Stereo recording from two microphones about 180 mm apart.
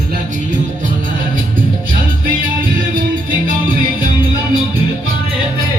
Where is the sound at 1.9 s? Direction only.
50° right (ahead or behind).